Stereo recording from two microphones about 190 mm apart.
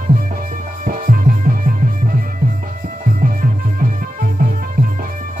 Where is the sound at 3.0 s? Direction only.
45° right (ahead or behind).